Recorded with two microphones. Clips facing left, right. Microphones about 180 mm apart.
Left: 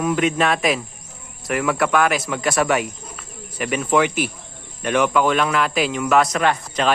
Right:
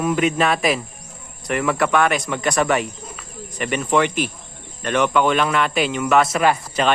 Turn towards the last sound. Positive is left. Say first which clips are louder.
# right 2 dB
turn(degrees=-5)  # may be behind; listen again after turning